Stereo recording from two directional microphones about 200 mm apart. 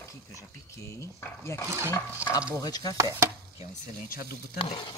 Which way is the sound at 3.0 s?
15° right (ahead or behind).